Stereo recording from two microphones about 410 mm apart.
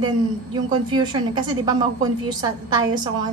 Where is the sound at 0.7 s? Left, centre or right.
Centre.